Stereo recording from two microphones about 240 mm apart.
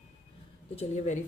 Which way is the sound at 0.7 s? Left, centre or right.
Left.